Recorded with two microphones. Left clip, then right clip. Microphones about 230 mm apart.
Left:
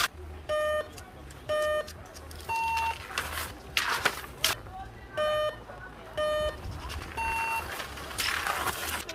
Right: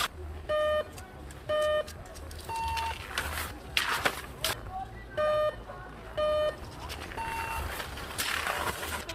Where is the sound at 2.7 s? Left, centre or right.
Centre.